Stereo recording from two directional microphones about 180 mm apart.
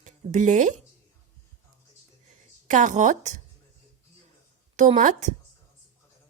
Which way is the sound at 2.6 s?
45° right (ahead or behind).